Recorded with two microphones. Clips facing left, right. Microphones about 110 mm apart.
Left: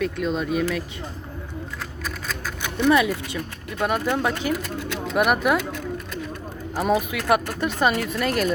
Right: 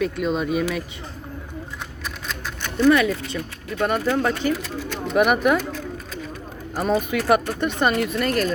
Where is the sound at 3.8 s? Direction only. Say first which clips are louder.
Right 2 dB; 5° left (ahead or behind).